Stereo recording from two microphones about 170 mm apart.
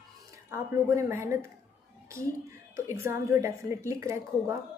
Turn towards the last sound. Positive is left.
turn(degrees=-15)  # may be behind; listen again after turning